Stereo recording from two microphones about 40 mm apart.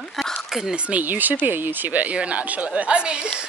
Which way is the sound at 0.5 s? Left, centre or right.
Centre.